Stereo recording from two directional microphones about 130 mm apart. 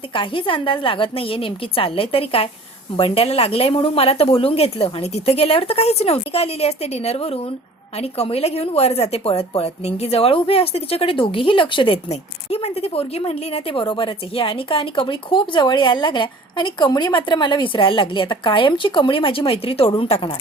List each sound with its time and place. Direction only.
0.1 s speech: 40° left (ahead or behind)